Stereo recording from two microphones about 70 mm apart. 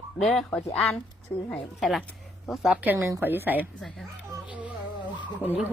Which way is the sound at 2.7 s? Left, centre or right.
Right.